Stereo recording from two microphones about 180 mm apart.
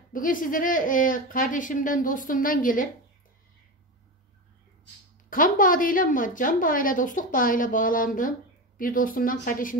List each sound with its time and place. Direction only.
0.1 s a woman's voice: 50° left (ahead or behind)
5.3 s a woman's voice: 50° left (ahead or behind)